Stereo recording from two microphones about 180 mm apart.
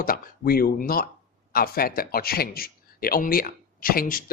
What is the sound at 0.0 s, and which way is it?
A man's voice, 55° left (ahead or behind).